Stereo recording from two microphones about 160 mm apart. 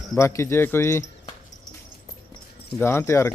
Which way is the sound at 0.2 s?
15° left (ahead or behind).